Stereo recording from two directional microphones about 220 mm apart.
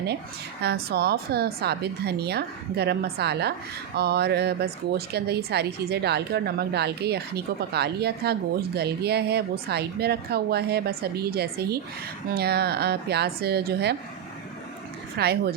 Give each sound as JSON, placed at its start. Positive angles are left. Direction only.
{"t": 0.6, "sound": "a woman's voice", "side_deg": -50}
{"t": 15.2, "sound": "a woman's voice", "side_deg": -45}